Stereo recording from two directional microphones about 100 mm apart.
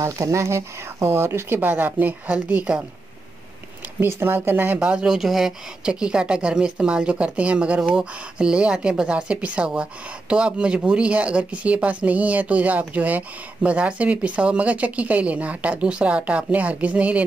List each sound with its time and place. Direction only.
0.0 s speech: 30° right (ahead or behind); by 2.8 s 15° right (ahead or behind)
4.0 s speech: 20° right (ahead or behind)
4.7 s speech: 10° right (ahead or behind)